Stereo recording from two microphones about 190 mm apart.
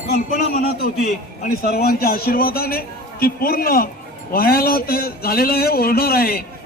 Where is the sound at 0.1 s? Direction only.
50° left (ahead or behind).